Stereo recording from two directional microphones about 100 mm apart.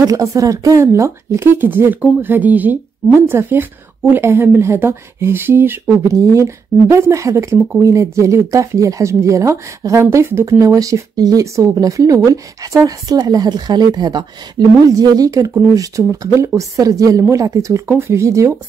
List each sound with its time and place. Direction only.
0.0 s speech: 35° right (ahead or behind)